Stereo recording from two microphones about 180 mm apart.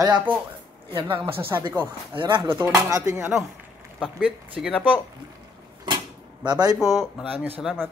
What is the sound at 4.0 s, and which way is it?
Speech, 5° right (ahead or behind).